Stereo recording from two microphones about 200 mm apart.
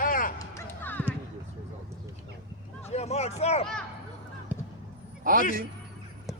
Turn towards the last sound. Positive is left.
turn(degrees=-45)  # may be behind; listen again after turning